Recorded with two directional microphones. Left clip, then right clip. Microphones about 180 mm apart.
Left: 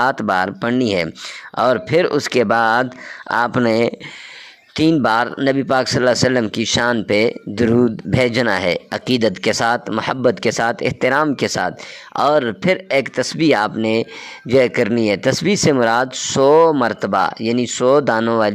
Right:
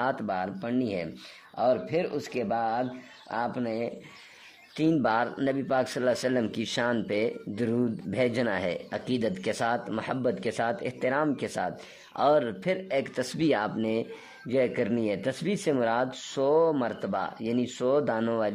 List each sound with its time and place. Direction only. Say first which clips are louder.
0.0 s speech: left 13 dB; 40° left (ahead or behind)
4.7 s speech: left 10 dB; 35° left (ahead or behind)